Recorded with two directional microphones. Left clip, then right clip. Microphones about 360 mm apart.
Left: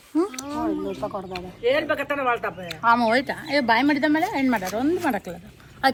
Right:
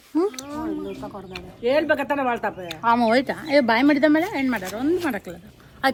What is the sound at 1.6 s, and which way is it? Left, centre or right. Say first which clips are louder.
Speech: right 2 dB; right.